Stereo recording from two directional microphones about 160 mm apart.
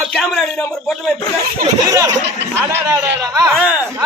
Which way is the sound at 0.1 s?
Centre (ahead or behind).